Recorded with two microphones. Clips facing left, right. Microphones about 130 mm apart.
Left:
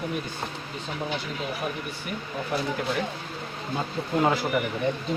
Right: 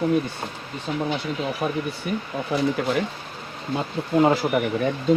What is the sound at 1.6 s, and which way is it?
Speech, 90° right.